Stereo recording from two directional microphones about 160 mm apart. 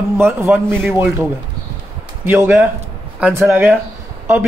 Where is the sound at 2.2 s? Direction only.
15° right (ahead or behind).